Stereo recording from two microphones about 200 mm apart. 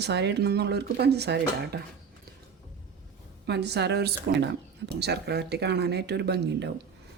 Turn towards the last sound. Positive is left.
turn(degrees=-60)  # may be behind; listen again after turning